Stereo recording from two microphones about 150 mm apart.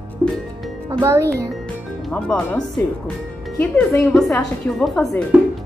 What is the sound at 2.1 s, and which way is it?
Speech, 10° left (ahead or behind).